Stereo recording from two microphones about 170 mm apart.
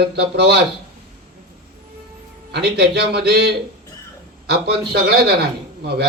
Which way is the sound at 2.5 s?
75° right (ahead or behind).